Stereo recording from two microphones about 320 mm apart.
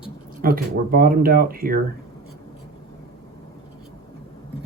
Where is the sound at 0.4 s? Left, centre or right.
Right.